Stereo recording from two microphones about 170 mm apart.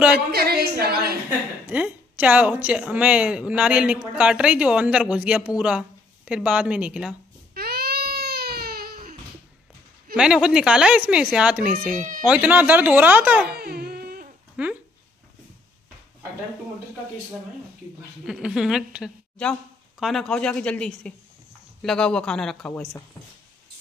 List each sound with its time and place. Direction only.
0.3 s a woman's voice: 65° right (ahead or behind)
1.7 s a woman's voice: 10° right (ahead or behind)
7.5 s baby cry: 65° right (ahead or behind)
10.1 s a woman's voice: 5° right (ahead or behind)
13.6 s a sound: 65° right (ahead or behind)
14.6 s speech: 5° right (ahead or behind)
18.2 s a woman's voice: 5° right (ahead or behind)